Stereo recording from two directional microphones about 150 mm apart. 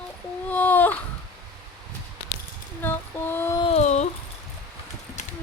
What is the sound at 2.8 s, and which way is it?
Mantra, 15° left (ahead or behind).